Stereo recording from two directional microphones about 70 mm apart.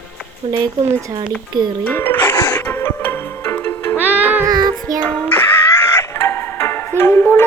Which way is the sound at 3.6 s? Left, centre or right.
Left.